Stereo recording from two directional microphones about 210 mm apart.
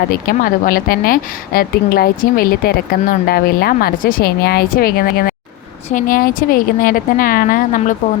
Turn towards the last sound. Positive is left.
turn(degrees=40)  # may be behind; listen again after turning